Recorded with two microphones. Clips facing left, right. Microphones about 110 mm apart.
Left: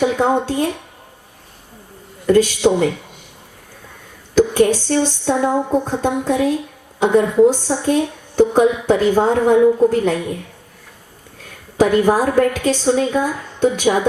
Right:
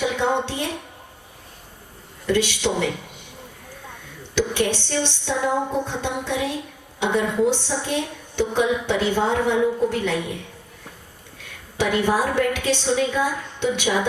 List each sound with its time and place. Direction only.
0.2 s a woman's voice: 45° left (ahead or behind)
2.2 s a woman's voice: 45° left (ahead or behind)
4.4 s a sound: 40° left (ahead or behind)
5.8 s a woman's voice: 40° left (ahead or behind)
11.8 s a woman's voice: 40° left (ahead or behind)